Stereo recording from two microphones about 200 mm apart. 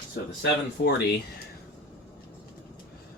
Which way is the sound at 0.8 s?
50° left (ahead or behind).